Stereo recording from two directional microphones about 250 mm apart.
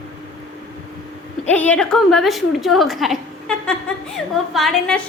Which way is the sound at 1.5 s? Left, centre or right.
Centre.